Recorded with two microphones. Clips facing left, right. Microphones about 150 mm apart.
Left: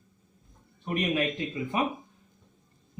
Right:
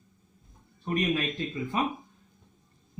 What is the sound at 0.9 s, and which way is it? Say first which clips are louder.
Speech: even; 20° left (ahead or behind).